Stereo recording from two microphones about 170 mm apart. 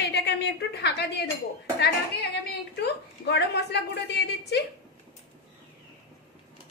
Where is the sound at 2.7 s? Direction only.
75° left (ahead or behind).